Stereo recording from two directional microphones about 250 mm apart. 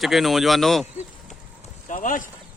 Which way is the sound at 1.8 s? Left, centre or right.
Left.